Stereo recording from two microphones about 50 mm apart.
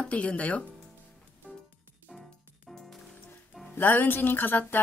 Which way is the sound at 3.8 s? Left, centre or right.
Left.